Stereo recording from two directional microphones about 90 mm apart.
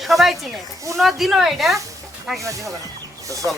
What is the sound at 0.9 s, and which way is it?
Speech, centre (ahead or behind).